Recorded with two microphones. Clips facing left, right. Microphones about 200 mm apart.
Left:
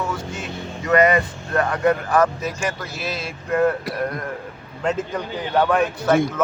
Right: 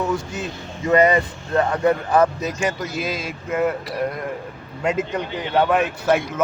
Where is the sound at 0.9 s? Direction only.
30° right (ahead or behind).